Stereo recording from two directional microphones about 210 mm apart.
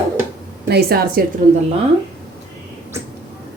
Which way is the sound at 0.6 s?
50° right (ahead or behind).